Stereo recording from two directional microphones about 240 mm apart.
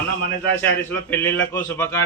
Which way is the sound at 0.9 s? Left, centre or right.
Centre.